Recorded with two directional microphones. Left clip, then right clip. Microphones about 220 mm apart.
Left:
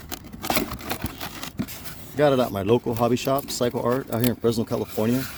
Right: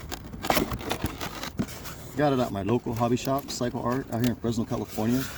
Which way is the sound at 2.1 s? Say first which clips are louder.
Left 5 dB; 40° left (ahead or behind).